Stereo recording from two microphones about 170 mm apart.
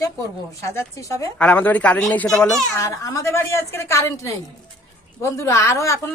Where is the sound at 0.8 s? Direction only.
20° left (ahead or behind); by 2.6 s 5° left (ahead or behind).